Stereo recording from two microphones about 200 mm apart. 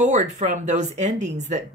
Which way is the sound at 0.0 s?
35° right (ahead or behind).